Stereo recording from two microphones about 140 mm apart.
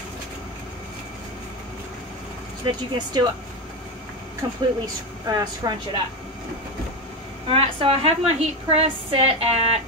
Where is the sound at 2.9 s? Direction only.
30° right (ahead or behind).